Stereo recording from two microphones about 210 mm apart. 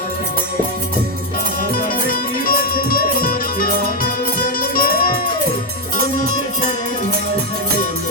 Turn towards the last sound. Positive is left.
turn(degrees=-45)  # may be behind; listen again after turning